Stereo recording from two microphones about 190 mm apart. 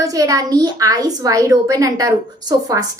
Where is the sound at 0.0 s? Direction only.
20° right (ahead or behind).